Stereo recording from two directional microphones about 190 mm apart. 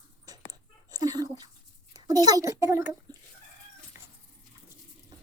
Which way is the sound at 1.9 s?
20° right (ahead or behind).